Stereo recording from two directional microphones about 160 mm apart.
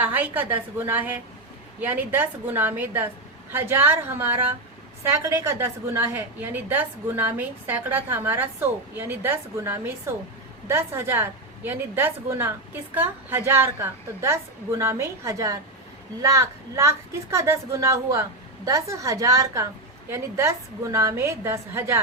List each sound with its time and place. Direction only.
0.0 s a woman's voice: 10° right (ahead or behind)